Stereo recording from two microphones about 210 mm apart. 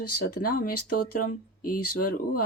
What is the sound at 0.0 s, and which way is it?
Speech, 90° left.